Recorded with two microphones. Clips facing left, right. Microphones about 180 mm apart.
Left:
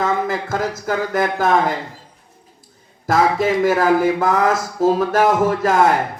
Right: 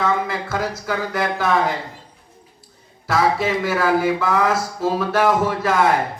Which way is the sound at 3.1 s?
50° left (ahead or behind).